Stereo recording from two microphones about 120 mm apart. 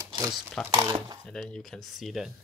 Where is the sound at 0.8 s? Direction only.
30° right (ahead or behind).